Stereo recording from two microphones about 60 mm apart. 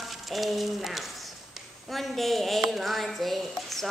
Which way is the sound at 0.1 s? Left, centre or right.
Centre.